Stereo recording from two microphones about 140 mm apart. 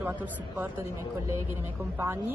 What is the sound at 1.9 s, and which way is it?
Speech, 15° right (ahead or behind).